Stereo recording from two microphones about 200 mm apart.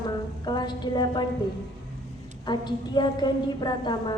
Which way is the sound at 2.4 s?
20° left (ahead or behind).